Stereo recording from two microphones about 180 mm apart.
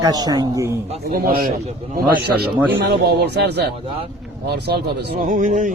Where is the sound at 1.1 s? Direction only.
55° right (ahead or behind).